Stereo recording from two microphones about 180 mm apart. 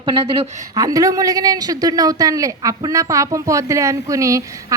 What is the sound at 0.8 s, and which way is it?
A man's voice, 20° right (ahead or behind).